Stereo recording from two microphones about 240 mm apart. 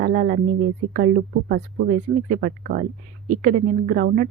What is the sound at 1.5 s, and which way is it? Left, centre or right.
Speech, right.